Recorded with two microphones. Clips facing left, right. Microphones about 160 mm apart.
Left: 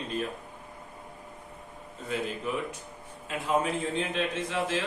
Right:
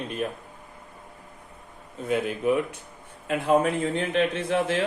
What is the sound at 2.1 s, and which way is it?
A man's voice, 60° right (ahead or behind).